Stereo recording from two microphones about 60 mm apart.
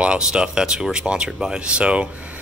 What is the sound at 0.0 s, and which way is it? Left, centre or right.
Speech, centre.